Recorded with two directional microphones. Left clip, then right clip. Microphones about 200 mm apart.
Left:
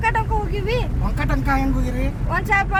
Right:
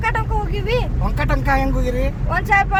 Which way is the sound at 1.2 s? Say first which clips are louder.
Right 3 dB; 40° right (ahead or behind).